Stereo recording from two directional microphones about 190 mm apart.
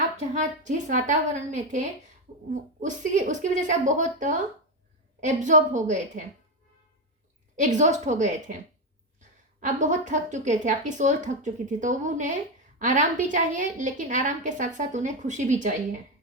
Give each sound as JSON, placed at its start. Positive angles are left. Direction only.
{"t": 0.3, "sound": "a woman's voice", "side_deg": -40}
{"t": 7.5, "sound": "a woman's voice", "side_deg": -40}
{"t": 9.6, "sound": "a woman's voice", "side_deg": -40}